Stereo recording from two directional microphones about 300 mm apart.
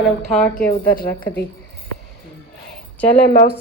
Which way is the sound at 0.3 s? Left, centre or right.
Centre.